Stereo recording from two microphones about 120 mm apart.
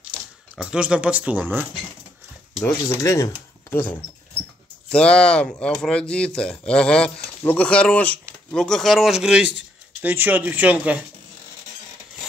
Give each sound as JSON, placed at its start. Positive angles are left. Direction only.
{"t": 0.6, "sound": "speech", "side_deg": -10}
{"t": 2.6, "sound": "speech", "side_deg": 25}
{"t": 4.9, "sound": "speech", "side_deg": 5}